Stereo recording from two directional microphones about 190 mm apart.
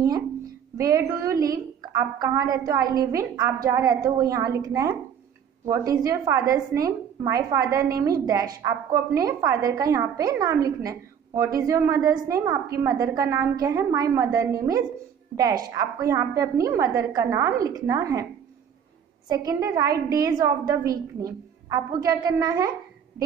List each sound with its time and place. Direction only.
0.7 s a woman's voice: 15° right (ahead or behind)
19.2 s a woman's voice: 20° right (ahead or behind)